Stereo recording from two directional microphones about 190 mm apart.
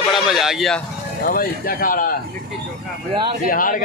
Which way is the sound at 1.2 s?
50° left (ahead or behind).